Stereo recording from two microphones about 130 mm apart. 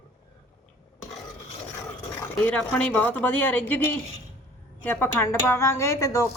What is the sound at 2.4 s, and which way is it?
Speech, 10° left (ahead or behind).